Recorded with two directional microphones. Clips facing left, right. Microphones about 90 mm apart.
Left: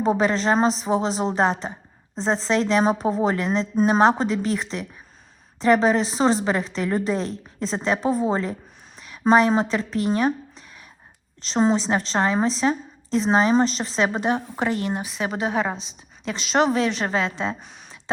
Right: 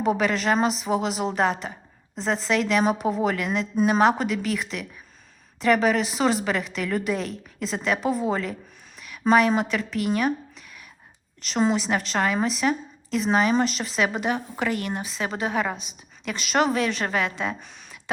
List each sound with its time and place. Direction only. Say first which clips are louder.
0.0 s a woman's voice: left 2 dB; 30° left (ahead or behind)
11.4 s a woman's voice: left 3 dB; 30° left (ahead or behind)